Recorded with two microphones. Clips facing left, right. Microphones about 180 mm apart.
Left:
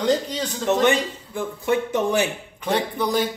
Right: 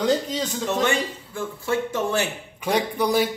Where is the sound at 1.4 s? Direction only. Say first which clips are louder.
Left 3 dB; 15° left (ahead or behind).